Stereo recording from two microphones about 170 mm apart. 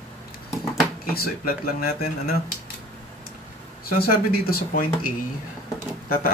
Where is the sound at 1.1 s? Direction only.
60° left (ahead or behind).